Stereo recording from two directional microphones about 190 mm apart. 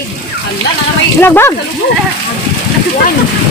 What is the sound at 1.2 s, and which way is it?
Speech, 10° left (ahead or behind).